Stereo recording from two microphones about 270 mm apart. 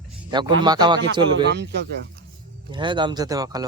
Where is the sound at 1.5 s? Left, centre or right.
Right.